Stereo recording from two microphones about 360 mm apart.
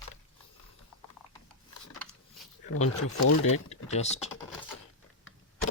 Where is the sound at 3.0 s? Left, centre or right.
Left.